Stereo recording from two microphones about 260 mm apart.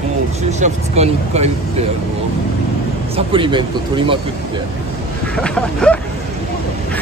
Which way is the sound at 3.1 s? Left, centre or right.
Centre.